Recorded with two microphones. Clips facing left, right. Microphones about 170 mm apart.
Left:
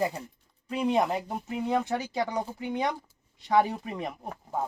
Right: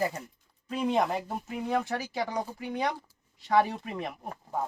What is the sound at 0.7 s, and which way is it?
Speech, 15° left (ahead or behind).